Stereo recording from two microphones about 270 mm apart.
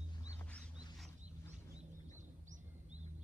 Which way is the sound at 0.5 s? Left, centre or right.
Centre.